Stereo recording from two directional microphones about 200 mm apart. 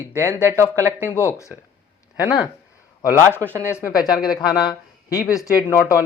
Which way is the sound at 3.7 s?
15° left (ahead or behind).